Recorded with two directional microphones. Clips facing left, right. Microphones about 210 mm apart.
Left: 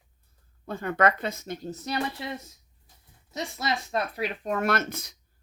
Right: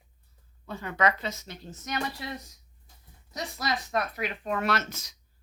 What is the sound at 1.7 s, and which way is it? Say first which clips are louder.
Speech: left 2 dB; 30° left (ahead or behind).